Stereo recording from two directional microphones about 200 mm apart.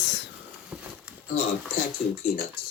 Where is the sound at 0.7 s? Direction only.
5° right (ahead or behind).